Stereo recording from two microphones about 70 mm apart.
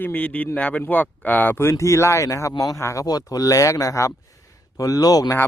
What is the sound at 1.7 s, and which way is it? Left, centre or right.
Speech, left.